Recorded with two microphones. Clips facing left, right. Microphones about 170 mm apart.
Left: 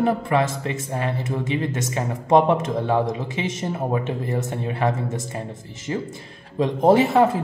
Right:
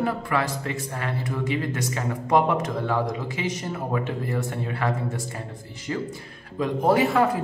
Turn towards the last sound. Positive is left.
turn(degrees=25)  # may be behind; listen again after turning